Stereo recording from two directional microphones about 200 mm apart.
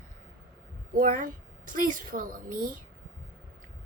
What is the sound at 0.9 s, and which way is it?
A woman's voice, 45° right (ahead or behind).